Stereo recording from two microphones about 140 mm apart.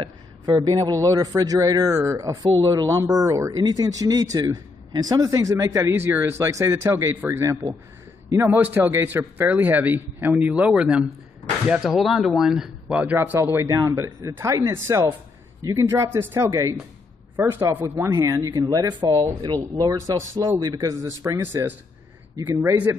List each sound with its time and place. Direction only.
0.5 s speech: 25° right (ahead or behind)